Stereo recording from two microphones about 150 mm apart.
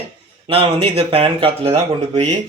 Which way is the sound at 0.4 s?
35° right (ahead or behind).